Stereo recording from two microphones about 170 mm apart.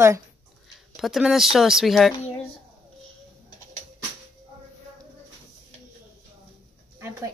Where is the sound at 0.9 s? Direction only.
Centre (ahead or behind).